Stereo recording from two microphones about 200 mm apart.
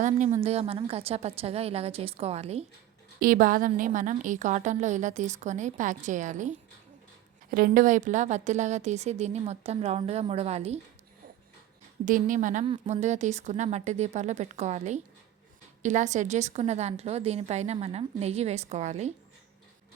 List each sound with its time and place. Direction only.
0.0 s a woman's voice: 40° right (ahead or behind)
3.2 s a woman's voice: 45° right (ahead or behind)
12.0 s a woman's voice: 40° right (ahead or behind)
12.6 s a woman's voice: 25° right (ahead or behind)